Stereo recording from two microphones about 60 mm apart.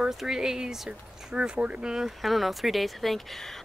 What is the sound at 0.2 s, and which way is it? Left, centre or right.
Speech, centre.